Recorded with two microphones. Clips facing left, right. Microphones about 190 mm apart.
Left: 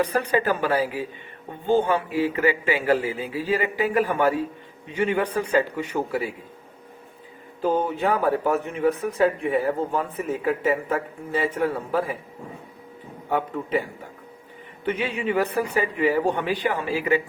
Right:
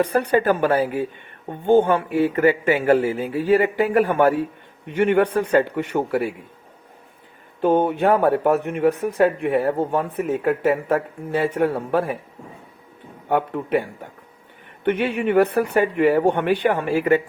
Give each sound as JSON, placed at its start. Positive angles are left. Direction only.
{"t": 0.0, "sound": "speech", "side_deg": -50}
{"t": 7.6, "sound": "speech", "side_deg": -65}
{"t": 13.3, "sound": "speech", "side_deg": -65}
{"t": 14.8, "sound": "speech", "side_deg": -60}